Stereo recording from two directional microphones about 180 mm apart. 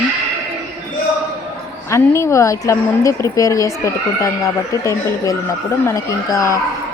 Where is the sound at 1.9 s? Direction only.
15° left (ahead or behind).